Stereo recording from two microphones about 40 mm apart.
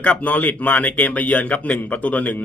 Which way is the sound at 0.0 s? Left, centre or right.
Left.